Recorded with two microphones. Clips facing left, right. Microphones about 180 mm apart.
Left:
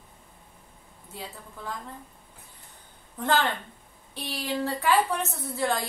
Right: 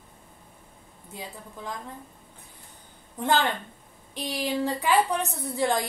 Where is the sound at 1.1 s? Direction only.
15° right (ahead or behind).